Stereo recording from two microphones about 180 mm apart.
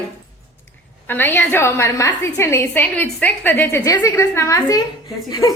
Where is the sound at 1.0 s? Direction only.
10° left (ahead or behind).